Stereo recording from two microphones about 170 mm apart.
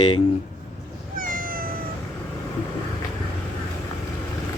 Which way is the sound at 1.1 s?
55° right (ahead or behind).